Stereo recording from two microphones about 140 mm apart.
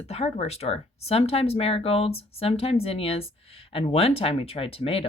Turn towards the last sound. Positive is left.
turn(degrees=45)  # may be behind; listen again after turning